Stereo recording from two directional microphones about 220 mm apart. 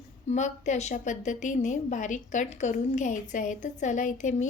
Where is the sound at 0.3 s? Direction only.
30° left (ahead or behind).